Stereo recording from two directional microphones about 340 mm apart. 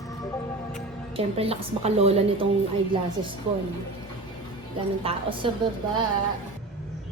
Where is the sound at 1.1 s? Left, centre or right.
Centre.